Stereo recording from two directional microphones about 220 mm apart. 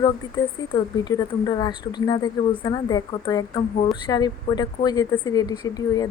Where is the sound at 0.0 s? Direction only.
20° left (ahead or behind).